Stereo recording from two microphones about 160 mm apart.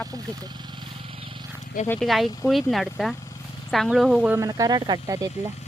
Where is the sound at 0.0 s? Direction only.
20° right (ahead or behind).